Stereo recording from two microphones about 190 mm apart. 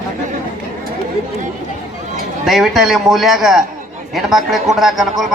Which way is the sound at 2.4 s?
Centre (ahead or behind).